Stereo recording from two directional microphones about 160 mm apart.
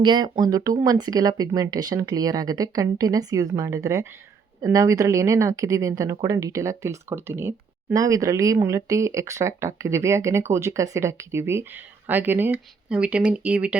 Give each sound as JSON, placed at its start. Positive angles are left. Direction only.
{"t": 0.0, "sound": "speech", "side_deg": -25}